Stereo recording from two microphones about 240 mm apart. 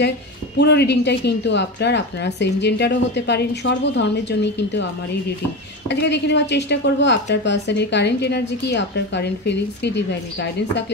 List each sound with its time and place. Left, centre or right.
0.6 s a woman's voice: left
5.9 s a woman's voice: left